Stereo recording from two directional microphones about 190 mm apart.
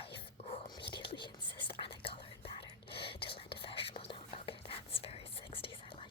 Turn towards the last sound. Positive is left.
turn(degrees=25)  # may be behind; listen again after turning